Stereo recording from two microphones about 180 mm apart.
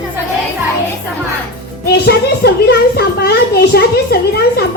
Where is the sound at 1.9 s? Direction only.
60° left (ahead or behind).